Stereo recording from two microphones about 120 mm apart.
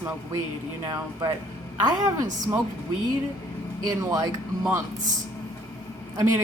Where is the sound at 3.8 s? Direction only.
30° right (ahead or behind).